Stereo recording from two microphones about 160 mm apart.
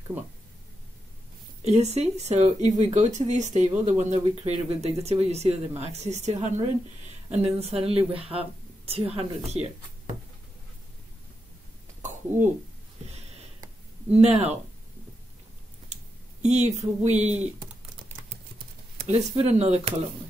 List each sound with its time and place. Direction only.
1.6 s a woman's voice: 45° right (ahead or behind)
14.1 s a woman's voice: 40° right (ahead or behind)
16.4 s speech: 45° right (ahead or behind)
19.0 s speech: 45° right (ahead or behind)